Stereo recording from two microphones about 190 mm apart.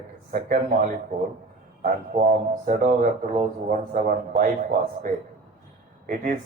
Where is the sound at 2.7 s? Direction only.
40° right (ahead or behind).